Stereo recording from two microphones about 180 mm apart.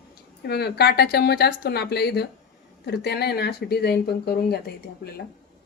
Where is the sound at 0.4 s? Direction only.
65° left (ahead or behind).